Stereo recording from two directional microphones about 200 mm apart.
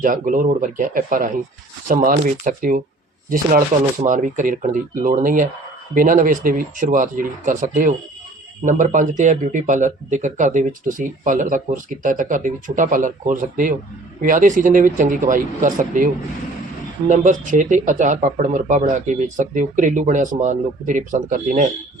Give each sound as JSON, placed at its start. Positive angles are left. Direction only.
{"t": 0.0, "sound": "speech", "side_deg": -45}